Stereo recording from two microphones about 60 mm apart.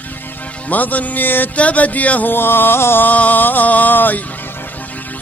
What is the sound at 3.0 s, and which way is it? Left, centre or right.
Speech, left.